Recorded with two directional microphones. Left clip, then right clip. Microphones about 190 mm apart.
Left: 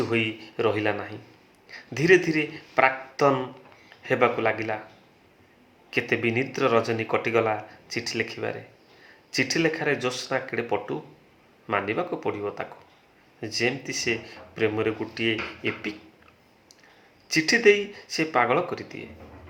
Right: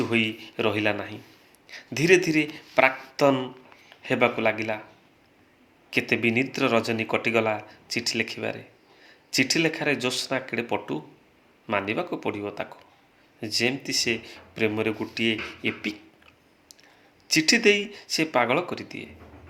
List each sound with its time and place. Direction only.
0.1 s speech: 35° right (ahead or behind)
5.9 s speech: 35° right (ahead or behind)
17.2 s speech: 35° right (ahead or behind)